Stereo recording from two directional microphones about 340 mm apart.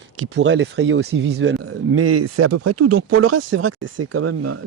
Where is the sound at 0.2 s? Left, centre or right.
Right.